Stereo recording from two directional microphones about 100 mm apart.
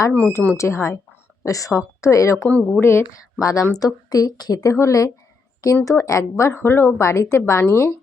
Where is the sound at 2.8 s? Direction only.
30° left (ahead or behind).